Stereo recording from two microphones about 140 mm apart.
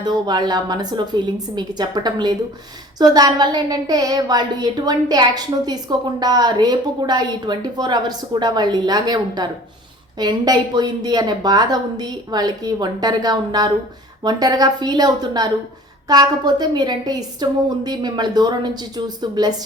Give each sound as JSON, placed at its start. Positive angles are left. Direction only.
{"t": 0.0, "sound": "a woman's voice", "side_deg": -30}